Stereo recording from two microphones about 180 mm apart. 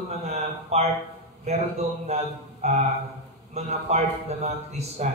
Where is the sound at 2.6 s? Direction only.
35° right (ahead or behind).